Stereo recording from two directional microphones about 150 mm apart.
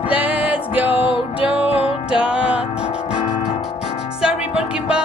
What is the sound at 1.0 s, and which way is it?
Music, 35° left (ahead or behind).